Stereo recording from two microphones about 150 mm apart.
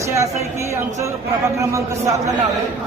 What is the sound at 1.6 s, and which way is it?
Speech, 20° right (ahead or behind).